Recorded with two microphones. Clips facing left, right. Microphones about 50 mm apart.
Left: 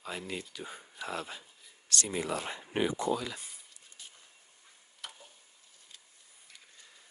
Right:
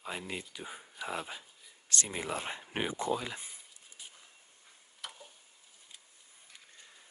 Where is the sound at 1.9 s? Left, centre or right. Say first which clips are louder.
Left 2 dB; right.